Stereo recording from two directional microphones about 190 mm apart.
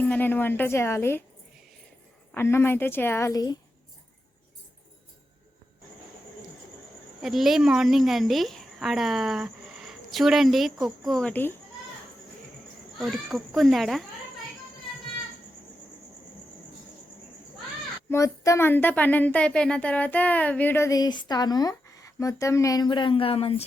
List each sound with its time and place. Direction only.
0.0 s speech: 10° left (ahead or behind)
2.3 s speech: 10° left (ahead or behind)
7.2 s a woman's voice: centre (ahead or behind)
13.0 s speech: centre (ahead or behind)
18.1 s speech: 15° left (ahead or behind)